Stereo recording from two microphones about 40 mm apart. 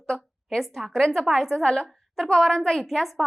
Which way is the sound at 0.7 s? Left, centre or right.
Centre.